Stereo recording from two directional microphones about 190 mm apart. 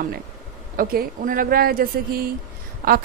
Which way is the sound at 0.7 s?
50° right (ahead or behind).